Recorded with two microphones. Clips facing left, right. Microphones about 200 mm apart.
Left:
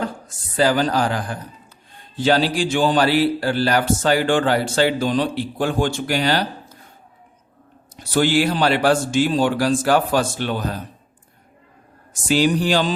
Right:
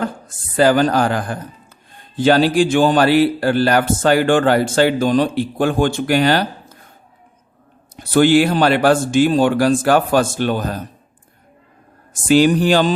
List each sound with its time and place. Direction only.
0.0 s a woman's voice: 55° right (ahead or behind)
7.9 s a man's voice: 55° right (ahead or behind)
12.1 s a man's voice: 55° right (ahead or behind)